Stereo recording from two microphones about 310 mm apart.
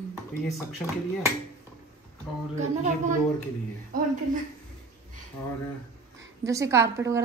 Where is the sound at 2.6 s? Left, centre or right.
Right.